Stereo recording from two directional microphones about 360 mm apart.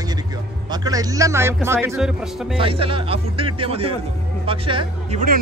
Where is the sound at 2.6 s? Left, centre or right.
Centre.